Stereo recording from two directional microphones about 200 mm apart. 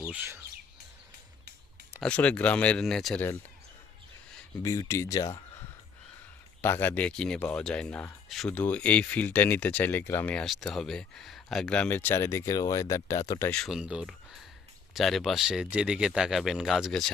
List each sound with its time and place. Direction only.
0.1 s speech: 10° right (ahead or behind)
2.0 s speech: 5° left (ahead or behind)
4.6 s speech: 15° left (ahead or behind)
6.6 s speech: 10° left (ahead or behind)